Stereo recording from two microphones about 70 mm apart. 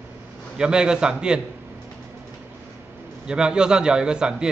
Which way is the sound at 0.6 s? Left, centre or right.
Centre.